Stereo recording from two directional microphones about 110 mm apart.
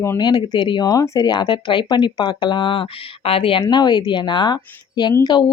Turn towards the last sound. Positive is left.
turn(degrees=40)  # may be behind; listen again after turning